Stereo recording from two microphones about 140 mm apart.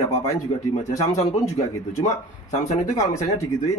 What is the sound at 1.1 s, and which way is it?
Speech, 20° left (ahead or behind).